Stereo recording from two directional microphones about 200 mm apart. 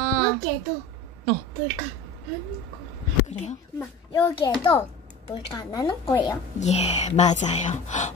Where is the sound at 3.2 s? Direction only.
35° left (ahead or behind).